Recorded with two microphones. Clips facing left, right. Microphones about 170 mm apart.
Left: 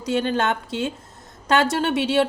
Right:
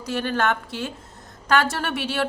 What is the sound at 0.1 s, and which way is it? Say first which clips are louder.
Speech: left 2 dB; 20° left (ahead or behind).